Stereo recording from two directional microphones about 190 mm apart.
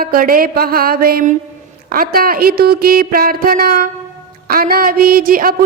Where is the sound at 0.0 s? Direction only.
50° right (ahead or behind).